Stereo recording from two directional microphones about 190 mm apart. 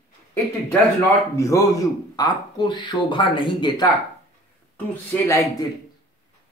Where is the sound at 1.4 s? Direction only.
15° left (ahead or behind).